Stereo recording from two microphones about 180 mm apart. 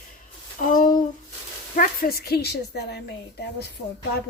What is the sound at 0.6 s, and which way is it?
A woman's voice, 50° left (ahead or behind).